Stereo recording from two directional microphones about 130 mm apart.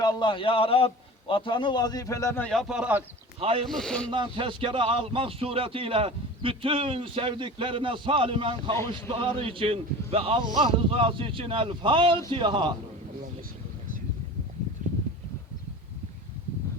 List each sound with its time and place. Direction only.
0.0 s a man's voice: 35° left (ahead or behind)
2.4 s a man's voice: 5° left (ahead or behind)
3.4 s speech: 45° right (ahead or behind)
3.7 s a man's voice: 5° left (ahead or behind)
4.1 s a man's voice: 40° right (ahead or behind)
14.8 s a sound: 80° right